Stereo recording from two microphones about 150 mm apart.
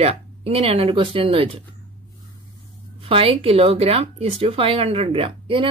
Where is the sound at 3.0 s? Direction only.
40° right (ahead or behind).